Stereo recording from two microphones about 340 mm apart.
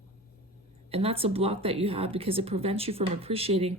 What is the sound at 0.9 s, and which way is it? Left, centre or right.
Speech, centre.